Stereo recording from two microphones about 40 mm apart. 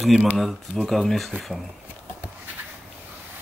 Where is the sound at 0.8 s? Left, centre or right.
Centre.